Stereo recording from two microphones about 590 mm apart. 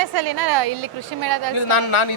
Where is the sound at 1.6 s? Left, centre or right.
Left.